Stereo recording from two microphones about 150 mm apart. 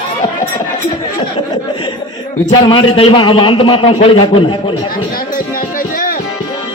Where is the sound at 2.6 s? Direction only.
35° left (ahead or behind).